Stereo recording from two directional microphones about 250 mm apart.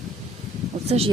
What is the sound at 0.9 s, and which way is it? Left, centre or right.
Speech, right.